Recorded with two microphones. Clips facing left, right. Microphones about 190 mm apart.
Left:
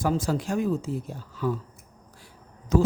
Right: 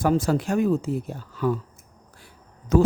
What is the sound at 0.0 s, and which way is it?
Speech, 65° right (ahead or behind).